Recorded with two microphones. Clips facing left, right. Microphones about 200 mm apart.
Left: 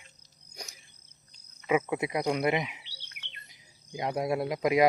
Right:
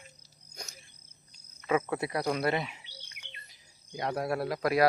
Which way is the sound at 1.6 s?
15° left (ahead or behind).